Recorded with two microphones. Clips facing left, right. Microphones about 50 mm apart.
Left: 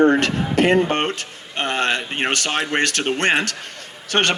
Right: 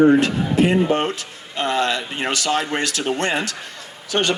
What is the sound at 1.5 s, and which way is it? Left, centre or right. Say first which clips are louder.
Speech: right 1 dB; left.